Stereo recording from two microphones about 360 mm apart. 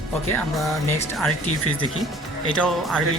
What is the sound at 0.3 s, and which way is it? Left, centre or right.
Speech, centre.